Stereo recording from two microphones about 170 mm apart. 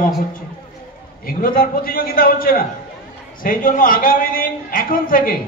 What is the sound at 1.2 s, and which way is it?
A man's voice, 60° left (ahead or behind).